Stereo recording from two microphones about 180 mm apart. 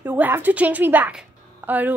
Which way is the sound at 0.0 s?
10° right (ahead or behind).